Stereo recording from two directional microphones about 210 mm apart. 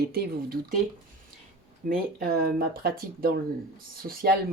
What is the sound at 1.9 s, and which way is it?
Speech, 45° right (ahead or behind).